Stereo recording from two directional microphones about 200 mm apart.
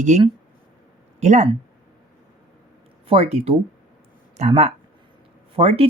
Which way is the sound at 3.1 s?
30° right (ahead or behind).